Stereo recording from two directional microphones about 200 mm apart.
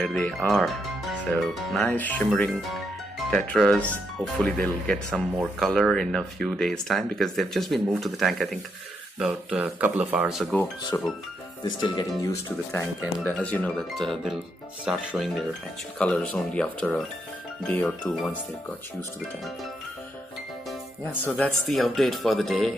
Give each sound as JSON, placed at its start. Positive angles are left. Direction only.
{"t": 0.0, "sound": "speech", "side_deg": 5}
{"t": 10.9, "sound": "speech", "side_deg": 10}
{"t": 21.1, "sound": "speech", "side_deg": 10}